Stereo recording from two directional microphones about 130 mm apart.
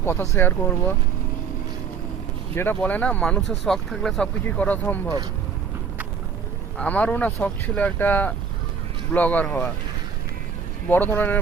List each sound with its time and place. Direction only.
0.0 s speech: 20° left (ahead or behind)
2.6 s speech: 15° left (ahead or behind)
6.7 s speech: 10° left (ahead or behind)
10.8 s speech: 15° left (ahead or behind)